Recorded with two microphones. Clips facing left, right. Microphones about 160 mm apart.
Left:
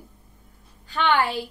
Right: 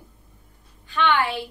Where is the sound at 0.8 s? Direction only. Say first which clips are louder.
Even; 40° left (ahead or behind).